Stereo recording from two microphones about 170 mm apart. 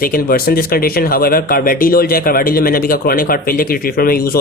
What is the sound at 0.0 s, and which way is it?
Speech, 55° left (ahead or behind).